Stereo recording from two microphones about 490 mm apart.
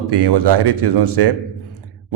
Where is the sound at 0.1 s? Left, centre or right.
Right.